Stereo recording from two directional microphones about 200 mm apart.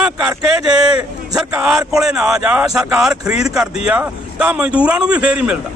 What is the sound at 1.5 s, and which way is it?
Speech, 5° right (ahead or behind).